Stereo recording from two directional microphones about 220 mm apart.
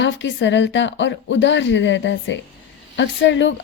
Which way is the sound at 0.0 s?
55° left (ahead or behind).